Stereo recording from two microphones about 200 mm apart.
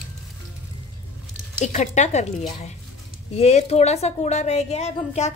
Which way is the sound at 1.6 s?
35° left (ahead or behind).